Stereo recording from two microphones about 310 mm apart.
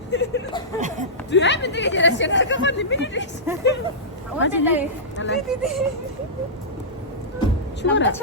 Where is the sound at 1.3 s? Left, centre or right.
Left.